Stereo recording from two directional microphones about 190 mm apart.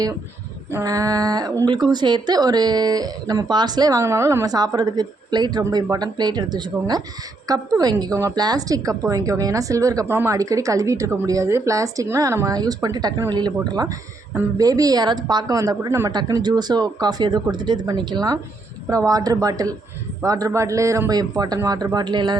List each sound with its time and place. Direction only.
0.7 s a woman's voice: 15° right (ahead or behind)